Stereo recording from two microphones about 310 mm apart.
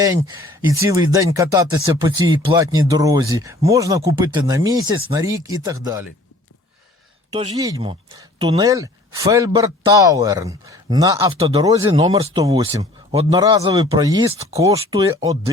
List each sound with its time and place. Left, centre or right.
0.0 s a man's voice: centre
7.3 s a man's voice: centre